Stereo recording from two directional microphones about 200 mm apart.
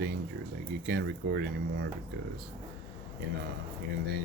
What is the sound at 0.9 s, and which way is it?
Speech, 55° right (ahead or behind).